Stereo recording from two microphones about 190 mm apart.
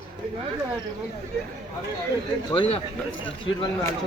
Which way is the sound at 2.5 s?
30° left (ahead or behind).